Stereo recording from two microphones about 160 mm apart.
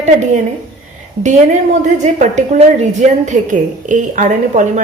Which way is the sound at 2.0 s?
50° right (ahead or behind).